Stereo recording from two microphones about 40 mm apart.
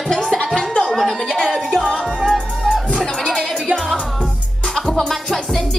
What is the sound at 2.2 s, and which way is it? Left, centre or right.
Music, centre.